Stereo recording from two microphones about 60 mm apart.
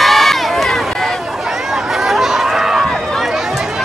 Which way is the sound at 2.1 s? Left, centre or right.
Centre.